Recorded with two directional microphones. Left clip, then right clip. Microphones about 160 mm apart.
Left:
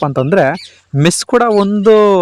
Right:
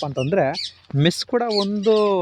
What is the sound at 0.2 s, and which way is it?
Speech, 50° left (ahead or behind).